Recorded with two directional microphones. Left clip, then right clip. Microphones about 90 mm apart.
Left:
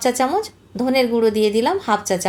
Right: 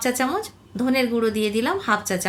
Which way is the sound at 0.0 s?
35° left (ahead or behind).